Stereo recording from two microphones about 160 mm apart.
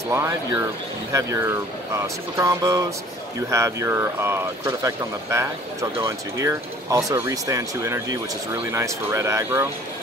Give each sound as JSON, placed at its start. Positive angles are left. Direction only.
{"t": 0.1, "sound": "speech", "side_deg": -15}